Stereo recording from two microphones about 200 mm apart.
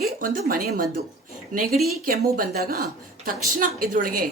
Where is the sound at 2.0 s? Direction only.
50° right (ahead or behind).